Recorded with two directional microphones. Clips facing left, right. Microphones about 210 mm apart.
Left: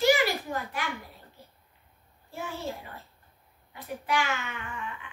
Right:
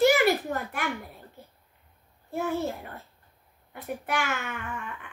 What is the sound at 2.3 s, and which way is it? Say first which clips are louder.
A woman's voice: right 7 dB; 60° right (ahead or behind).